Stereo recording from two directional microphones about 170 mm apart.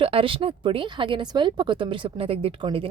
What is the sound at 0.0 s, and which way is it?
A woman's voice, 30° right (ahead or behind).